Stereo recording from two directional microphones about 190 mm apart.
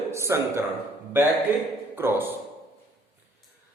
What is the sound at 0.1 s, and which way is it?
Speech, 15° right (ahead or behind).